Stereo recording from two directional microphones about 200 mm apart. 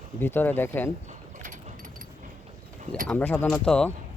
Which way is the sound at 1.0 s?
40° right (ahead or behind).